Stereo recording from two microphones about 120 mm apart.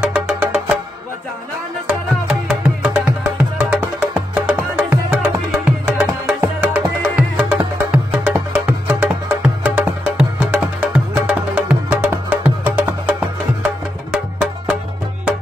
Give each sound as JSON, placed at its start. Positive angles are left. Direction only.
{"t": 0.0, "sound": "music", "side_deg": -10}
{"t": 1.9, "sound": "music", "side_deg": -5}